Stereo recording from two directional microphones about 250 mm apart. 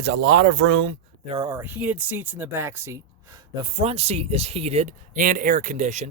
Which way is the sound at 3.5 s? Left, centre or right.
Right.